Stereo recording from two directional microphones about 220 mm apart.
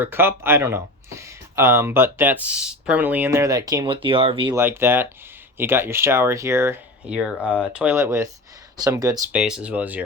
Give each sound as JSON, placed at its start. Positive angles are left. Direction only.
{"t": 0.0, "sound": "speech", "side_deg": -10}
{"t": 4.5, "sound": "speech", "side_deg": -10}
{"t": 9.4, "sound": "speech", "side_deg": -5}